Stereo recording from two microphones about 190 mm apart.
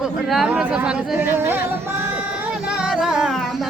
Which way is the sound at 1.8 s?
10° right (ahead or behind).